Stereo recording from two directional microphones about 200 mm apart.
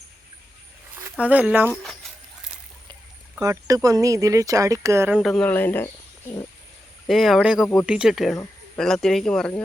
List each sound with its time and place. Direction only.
1.1 s speech: 5° right (ahead or behind)
3.4 s speech: 15° right (ahead or behind); by 5.9 s 10° left (ahead or behind)
7.1 s speech: centre (ahead or behind)